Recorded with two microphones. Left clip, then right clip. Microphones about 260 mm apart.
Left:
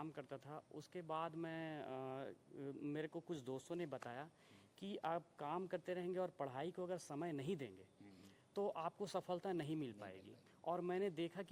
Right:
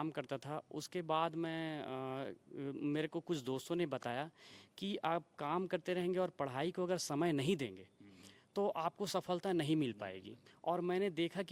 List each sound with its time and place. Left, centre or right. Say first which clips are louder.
0.0 s speech: right 9 dB; right
4.8 s speech: right 6 dB; right
8.5 s speech: right 6 dB; right